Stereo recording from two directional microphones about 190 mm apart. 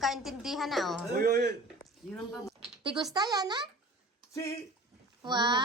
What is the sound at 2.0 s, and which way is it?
Speech, centre (ahead or behind).